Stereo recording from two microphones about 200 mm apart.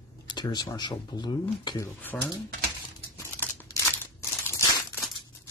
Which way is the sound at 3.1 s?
15° left (ahead or behind).